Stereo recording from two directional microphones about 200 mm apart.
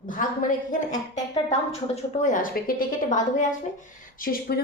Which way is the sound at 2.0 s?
40° left (ahead or behind).